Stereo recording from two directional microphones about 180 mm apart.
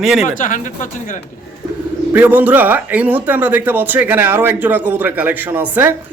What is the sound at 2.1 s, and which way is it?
Speech, 10° right (ahead or behind).